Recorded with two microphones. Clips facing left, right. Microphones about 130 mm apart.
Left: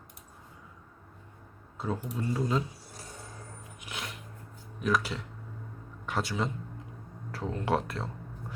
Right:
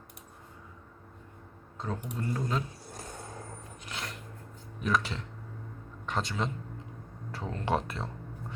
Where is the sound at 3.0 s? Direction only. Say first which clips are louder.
Right 4 dB; 50° right (ahead or behind).